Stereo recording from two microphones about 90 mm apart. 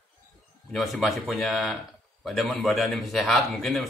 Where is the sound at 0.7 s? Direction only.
Centre (ahead or behind).